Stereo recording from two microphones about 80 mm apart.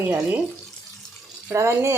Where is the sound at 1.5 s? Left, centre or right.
Right.